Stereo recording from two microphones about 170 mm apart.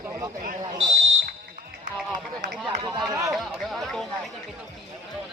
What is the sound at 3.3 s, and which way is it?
Speech, centre (ahead or behind).